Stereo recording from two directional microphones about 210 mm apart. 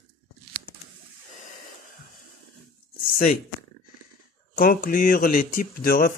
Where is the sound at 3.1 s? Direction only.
40° left (ahead or behind).